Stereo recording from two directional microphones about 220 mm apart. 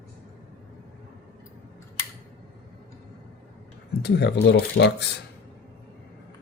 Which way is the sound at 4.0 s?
50° left (ahead or behind).